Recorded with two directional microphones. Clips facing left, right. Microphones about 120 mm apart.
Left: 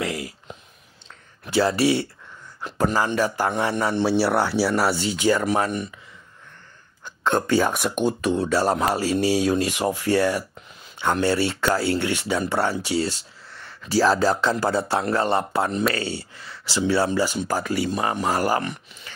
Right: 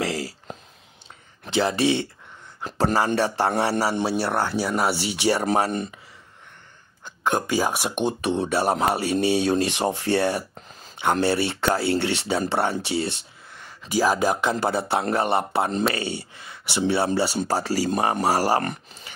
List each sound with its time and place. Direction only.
0.0 s a sound: 35° right (ahead or behind)
1.4 s speech: 20° right (ahead or behind)
2.6 s speech: 35° right (ahead or behind)
3.8 s a man's voice: 5° right (ahead or behind)
4.9 s speech: 30° right (ahead or behind)
7.1 s speech: 15° right (ahead or behind); by 17.8 s 30° right (ahead or behind)
17.8 s speech: 40° right (ahead or behind)
18.6 s speech: 40° right (ahead or behind)